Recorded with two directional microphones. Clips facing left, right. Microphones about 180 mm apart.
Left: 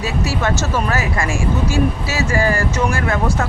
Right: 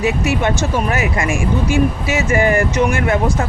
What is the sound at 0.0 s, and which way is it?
Speech, 20° right (ahead or behind).